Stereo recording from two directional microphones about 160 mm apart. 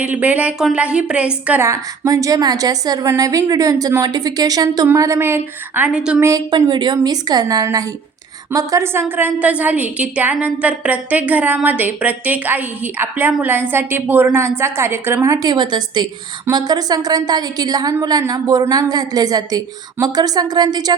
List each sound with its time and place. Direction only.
0.0 s a woman's voice: 10° right (ahead or behind)
6.1 s a woman's voice: 20° right (ahead or behind)